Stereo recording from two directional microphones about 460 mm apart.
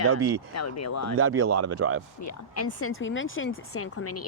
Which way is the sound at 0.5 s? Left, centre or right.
Left.